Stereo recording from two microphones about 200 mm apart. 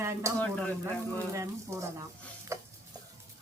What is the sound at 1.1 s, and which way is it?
Speech, 15° right (ahead or behind).